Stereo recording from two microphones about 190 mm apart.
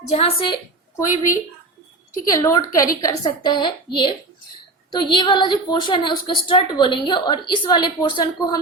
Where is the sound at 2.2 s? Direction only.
20° left (ahead or behind).